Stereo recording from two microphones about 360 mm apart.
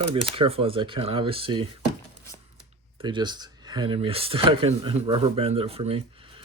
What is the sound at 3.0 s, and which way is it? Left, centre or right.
Speech, centre.